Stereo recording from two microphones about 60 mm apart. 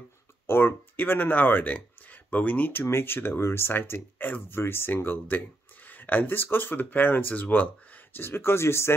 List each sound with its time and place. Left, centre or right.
0.5 s speech: left